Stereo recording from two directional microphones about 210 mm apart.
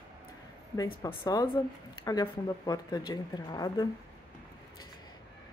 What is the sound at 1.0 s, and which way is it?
A woman's voice, 20° left (ahead or behind).